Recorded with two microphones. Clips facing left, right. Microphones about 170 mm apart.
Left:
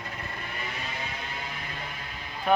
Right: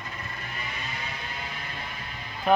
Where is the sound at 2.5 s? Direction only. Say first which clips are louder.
Right 2 dB; centre (ahead or behind).